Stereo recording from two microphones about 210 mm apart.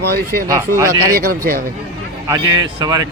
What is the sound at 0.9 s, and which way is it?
Speech, 90° right.